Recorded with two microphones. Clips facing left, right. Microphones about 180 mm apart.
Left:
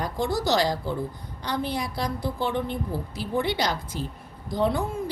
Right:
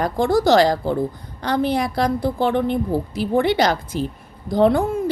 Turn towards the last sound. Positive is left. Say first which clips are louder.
# right 9 dB
turn(degrees=-80)